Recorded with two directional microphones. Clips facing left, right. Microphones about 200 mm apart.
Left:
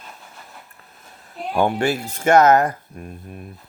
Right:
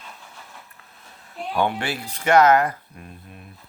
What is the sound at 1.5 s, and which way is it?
Speech, 45° left (ahead or behind).